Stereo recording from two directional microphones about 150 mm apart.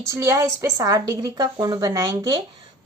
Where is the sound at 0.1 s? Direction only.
20° right (ahead or behind).